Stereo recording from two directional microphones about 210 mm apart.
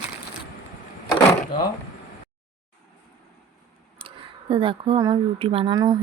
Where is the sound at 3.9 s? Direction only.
25° right (ahead or behind).